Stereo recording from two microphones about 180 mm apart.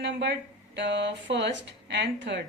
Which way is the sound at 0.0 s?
75° right (ahead or behind).